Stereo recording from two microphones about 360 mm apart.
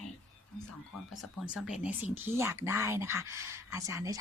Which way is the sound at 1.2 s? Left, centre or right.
Centre.